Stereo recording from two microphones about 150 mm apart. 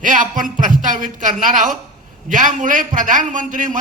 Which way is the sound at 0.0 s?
60° right (ahead or behind).